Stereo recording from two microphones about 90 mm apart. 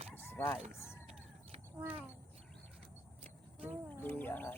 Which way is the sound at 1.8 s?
20° right (ahead or behind).